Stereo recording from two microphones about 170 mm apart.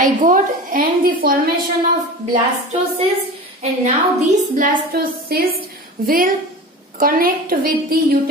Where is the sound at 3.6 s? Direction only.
45° right (ahead or behind); by 8.3 s 60° right (ahead or behind).